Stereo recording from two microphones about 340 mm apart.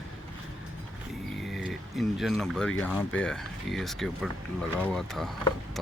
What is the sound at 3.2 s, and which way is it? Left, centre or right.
Speech, centre.